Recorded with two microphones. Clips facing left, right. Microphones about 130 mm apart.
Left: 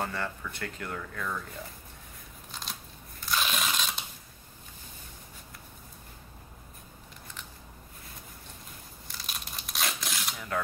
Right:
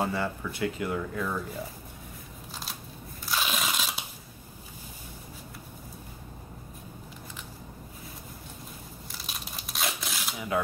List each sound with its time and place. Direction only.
0.0 s speech: 10° right (ahead or behind)
2.5 s scissors: 5° right (ahead or behind)
3.3 s crunch: 5° right (ahead or behind)
9.1 s crumpling: centre (ahead or behind)